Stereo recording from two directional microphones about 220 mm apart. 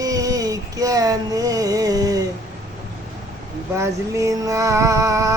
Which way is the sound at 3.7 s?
15° right (ahead or behind).